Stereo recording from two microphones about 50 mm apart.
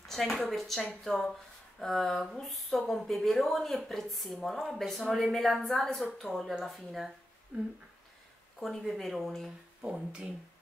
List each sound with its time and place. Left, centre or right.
0.1 s speech: centre
7.5 s speech: right
8.5 s speech: centre